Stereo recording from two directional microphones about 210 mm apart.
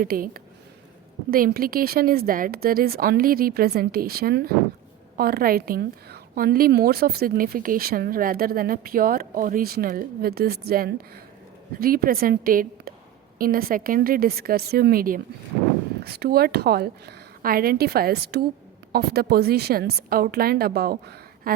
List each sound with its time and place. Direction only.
0.0 s a woman's voice: 45° right (ahead or behind)